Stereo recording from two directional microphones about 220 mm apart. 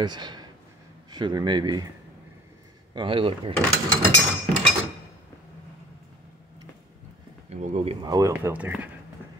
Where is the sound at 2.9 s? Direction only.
20° right (ahead or behind).